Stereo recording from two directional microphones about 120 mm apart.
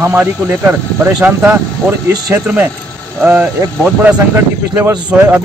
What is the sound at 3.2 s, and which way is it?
Speech, 15° right (ahead or behind).